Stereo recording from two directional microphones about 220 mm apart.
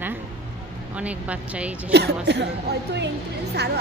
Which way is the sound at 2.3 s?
50° right (ahead or behind).